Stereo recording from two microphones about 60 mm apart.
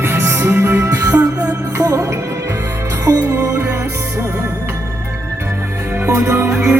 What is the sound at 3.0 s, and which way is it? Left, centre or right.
Music, right.